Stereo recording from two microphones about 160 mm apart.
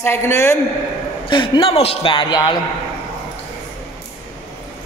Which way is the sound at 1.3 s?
30° left (ahead or behind).